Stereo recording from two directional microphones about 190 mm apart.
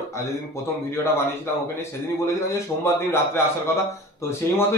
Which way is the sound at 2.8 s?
15° left (ahead or behind).